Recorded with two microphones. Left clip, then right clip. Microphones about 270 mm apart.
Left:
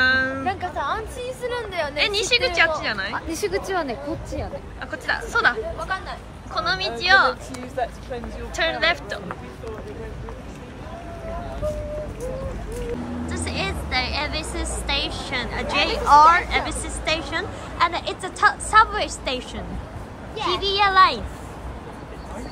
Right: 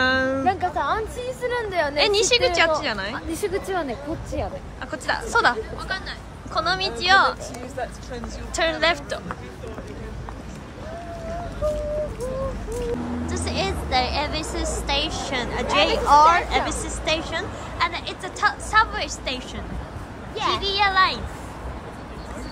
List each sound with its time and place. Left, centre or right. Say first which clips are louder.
0.0 s a sound: left 1 dB; centre
0.5 s a sound: right 3 dB; right
2.0 s a woman's voice: right 1 dB; centre
4.9 s a woman's voice: right 1 dB; centre
8.5 s a woman's voice: even; centre
13.3 s a woman's voice: right 1 dB; centre
20.5 s a woman's voice: left 3 dB; centre